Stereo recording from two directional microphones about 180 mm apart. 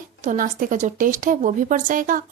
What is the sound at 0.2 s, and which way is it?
A woman's voice, 45° right (ahead or behind).